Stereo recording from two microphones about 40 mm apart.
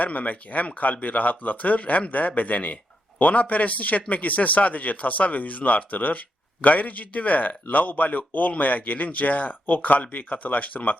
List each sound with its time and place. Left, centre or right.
0.0 s speech: left